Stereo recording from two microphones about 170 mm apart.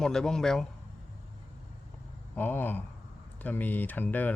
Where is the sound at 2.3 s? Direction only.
10° left (ahead or behind).